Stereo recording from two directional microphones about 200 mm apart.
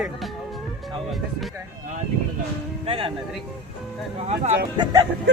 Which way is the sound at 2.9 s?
25° right (ahead or behind).